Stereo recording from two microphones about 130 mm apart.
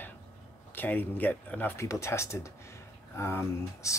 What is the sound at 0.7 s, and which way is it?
Speech, 15° left (ahead or behind).